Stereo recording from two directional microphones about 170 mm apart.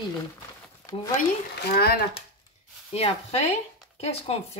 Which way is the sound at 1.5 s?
65° left (ahead or behind).